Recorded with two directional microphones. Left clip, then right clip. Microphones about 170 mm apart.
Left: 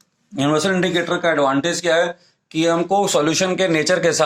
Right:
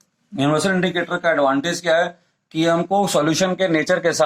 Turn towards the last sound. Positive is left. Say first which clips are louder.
# left 1 dB
turn(degrees=45)  # may be behind; listen again after turning